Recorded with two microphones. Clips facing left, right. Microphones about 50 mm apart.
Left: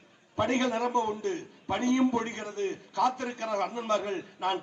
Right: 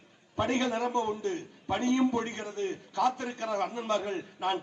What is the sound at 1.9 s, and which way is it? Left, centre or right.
Speech, left.